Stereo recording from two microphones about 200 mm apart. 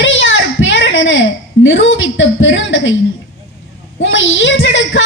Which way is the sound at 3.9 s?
70° left (ahead or behind).